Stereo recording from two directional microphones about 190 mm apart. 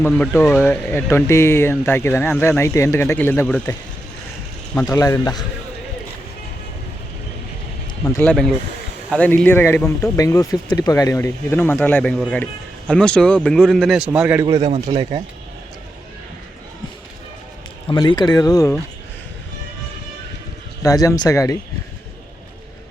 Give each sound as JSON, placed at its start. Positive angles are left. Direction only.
{"t": 0.0, "sound": "speech", "side_deg": 10}
{"t": 4.9, "sound": "speech", "side_deg": 15}
{"t": 8.2, "sound": "a man's voice", "side_deg": 5}
{"t": 14.4, "sound": "speech", "side_deg": -30}
{"t": 17.8, "sound": "speech", "side_deg": 25}
{"t": 20.8, "sound": "speech", "side_deg": 20}